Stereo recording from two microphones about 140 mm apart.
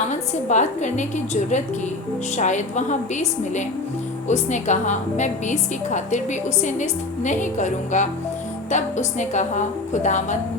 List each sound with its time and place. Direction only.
0.1 s a woman's voice: 55° left (ahead or behind)